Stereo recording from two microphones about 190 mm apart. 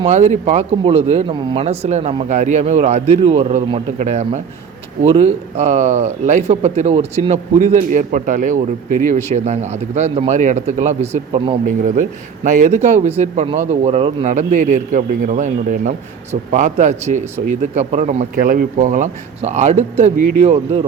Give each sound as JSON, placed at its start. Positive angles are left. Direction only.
{"t": 0.0, "sound": "speech", "side_deg": -35}
{"t": 14.3, "sound": "speech", "side_deg": -40}